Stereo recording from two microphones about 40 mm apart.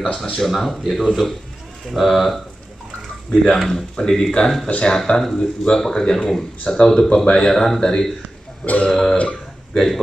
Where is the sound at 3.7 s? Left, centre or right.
Centre.